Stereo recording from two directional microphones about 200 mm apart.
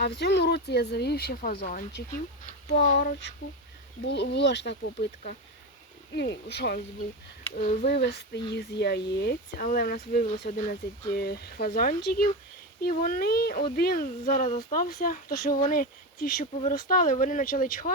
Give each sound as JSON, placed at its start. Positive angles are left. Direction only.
{"t": 0.0, "sound": "speech", "side_deg": 55}
{"t": 2.8, "sound": "a sound", "side_deg": 40}
{"t": 4.0, "sound": "speech", "side_deg": 60}
{"t": 7.5, "sound": "speech", "side_deg": 45}